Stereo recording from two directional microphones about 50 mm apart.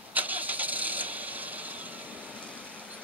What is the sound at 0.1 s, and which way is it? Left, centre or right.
Vehicle, right.